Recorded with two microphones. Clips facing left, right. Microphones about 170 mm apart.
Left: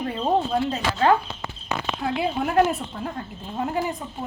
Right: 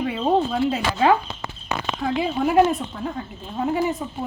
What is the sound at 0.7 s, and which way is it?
Speech, 10° right (ahead or behind).